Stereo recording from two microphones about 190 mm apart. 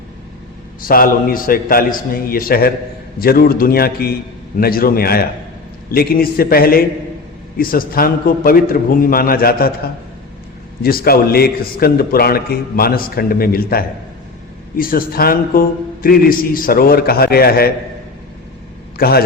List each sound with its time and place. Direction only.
0.9 s a man's voice: 50° left (ahead or behind)
10.8 s a man's voice: 50° left (ahead or behind)
18.9 s a man's voice: 55° left (ahead or behind)